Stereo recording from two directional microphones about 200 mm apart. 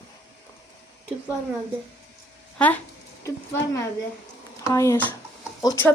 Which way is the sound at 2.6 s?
5° left (ahead or behind).